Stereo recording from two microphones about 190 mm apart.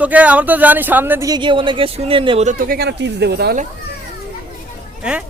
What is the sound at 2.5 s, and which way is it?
Speech, 50° right (ahead or behind).